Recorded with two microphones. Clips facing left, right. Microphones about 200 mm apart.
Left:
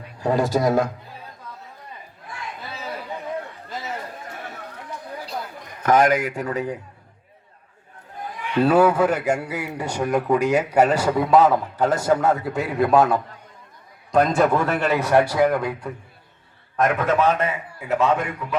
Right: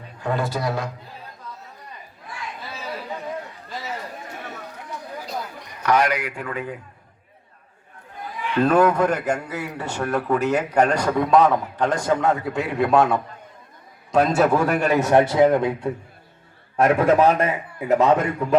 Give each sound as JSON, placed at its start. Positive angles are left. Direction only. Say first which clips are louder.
{"t": 0.2, "sound": "speech", "louder": "left 5 dB", "side_deg": 35}
{"t": 5.8, "sound": "speech", "louder": "left 3 dB", "side_deg": 50}
{"t": 8.5, "sound": "a man's voice", "louder": "left 1 dB", "side_deg": 10}